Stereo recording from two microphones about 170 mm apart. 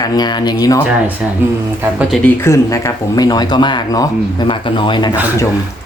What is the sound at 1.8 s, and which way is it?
Speech, 5° right (ahead or behind).